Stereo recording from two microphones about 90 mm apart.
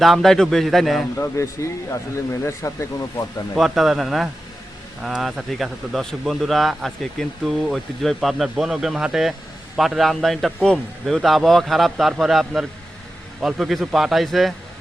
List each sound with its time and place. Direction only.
0.0 s speech: centre (ahead or behind)
1.1 s speech: 30° left (ahead or behind)
3.5 s speech: centre (ahead or behind)